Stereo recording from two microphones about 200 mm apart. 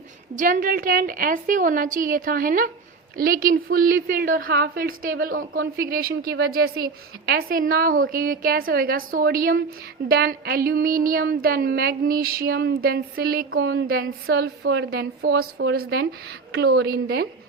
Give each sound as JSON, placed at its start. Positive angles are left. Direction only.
{"t": 0.3, "sound": "a woman's voice", "side_deg": -40}